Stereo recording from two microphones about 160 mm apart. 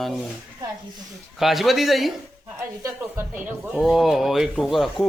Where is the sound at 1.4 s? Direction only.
Centre (ahead or behind).